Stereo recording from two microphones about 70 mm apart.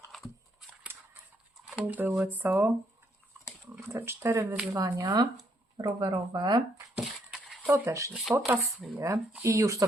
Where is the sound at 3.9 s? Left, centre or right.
Right.